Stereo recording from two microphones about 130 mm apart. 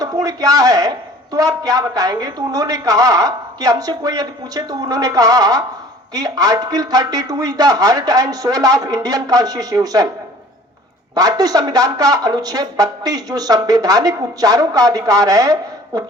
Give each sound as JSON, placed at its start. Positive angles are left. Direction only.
{"t": 0.0, "sound": "a man's voice", "side_deg": -30}
{"t": 11.1, "sound": "a man's voice", "side_deg": -30}